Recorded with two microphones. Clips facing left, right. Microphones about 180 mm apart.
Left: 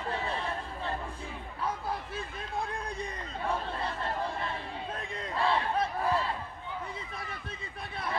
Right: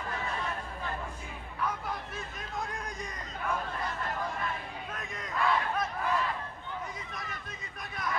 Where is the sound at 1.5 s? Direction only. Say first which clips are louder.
Even; 30° left (ahead or behind).